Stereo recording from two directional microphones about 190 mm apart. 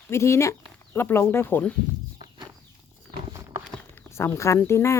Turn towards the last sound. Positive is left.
turn(degrees=15)  # may be behind; listen again after turning